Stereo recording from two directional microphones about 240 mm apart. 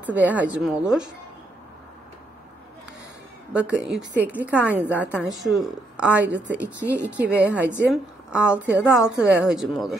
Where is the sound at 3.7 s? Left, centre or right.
Centre.